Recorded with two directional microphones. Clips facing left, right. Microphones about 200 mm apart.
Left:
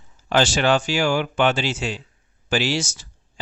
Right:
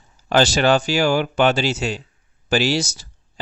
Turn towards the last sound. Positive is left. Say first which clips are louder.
# right 3 dB
turn(degrees=-35)  # may be behind; listen again after turning